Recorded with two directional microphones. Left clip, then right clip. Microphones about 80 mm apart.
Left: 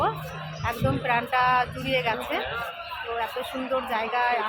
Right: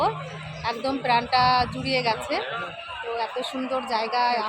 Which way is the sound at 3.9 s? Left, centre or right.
Right.